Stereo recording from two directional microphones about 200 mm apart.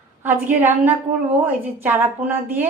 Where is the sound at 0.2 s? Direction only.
10° right (ahead or behind).